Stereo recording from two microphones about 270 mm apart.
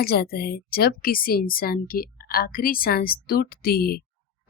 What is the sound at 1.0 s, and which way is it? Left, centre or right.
Speech, left.